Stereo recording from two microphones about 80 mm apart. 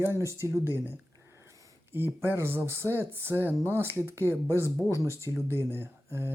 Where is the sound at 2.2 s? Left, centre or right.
Right.